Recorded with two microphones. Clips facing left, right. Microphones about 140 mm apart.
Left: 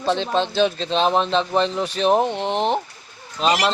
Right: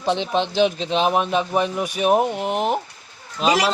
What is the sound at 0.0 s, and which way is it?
Speech, 15° right (ahead or behind).